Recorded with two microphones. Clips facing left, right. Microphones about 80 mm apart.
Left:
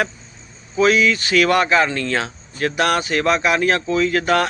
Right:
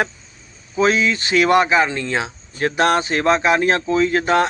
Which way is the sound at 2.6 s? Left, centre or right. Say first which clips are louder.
Right 2 dB; right.